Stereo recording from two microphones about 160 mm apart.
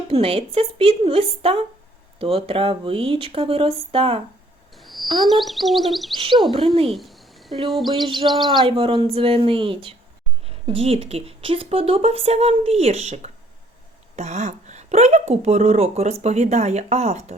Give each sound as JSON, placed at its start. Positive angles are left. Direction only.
{"t": 0.1, "sound": "speech", "side_deg": -35}
{"t": 4.7, "sound": "a sound", "side_deg": 0}
{"t": 6.1, "sound": "speech", "side_deg": -35}
{"t": 6.9, "sound": "cricket", "side_deg": 0}
{"t": 8.0, "sound": "speech", "side_deg": -30}